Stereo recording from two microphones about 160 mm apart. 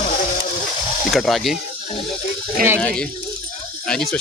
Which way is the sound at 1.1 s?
Centre (ahead or behind).